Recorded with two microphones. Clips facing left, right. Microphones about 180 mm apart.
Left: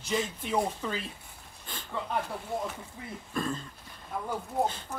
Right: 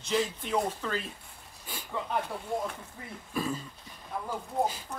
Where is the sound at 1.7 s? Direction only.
10° right (ahead or behind).